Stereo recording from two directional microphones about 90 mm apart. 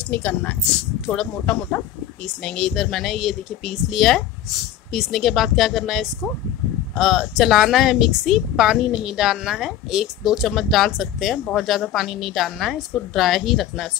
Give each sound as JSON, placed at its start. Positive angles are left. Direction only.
{"t": 0.1, "sound": "speech", "side_deg": 15}